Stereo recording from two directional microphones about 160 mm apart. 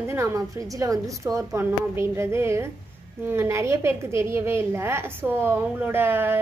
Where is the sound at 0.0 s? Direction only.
15° right (ahead or behind).